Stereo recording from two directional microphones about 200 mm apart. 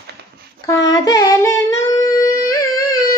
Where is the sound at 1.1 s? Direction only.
15° left (ahead or behind).